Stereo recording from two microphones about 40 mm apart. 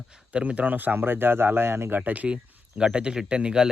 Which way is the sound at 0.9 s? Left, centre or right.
Right.